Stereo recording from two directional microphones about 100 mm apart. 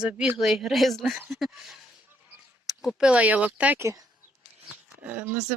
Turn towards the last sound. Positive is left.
turn(degrees=-20)  # may be behind; listen again after turning